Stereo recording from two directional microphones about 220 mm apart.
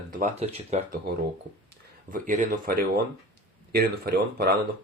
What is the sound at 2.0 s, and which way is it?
Speech, 35° right (ahead or behind).